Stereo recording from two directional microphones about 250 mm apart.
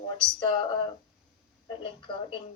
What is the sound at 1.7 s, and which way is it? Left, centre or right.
Speech, centre.